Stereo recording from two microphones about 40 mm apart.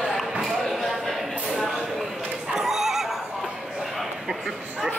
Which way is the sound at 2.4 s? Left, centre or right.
Centre.